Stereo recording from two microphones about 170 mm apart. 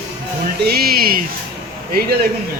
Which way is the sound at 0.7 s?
65° right (ahead or behind).